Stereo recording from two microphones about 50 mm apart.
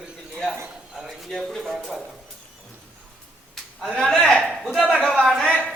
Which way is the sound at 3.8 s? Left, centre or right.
Centre.